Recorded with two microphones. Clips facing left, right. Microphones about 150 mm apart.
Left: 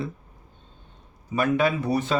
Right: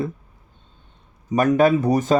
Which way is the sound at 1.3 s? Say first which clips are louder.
Right 6 dB; 45° right (ahead or behind).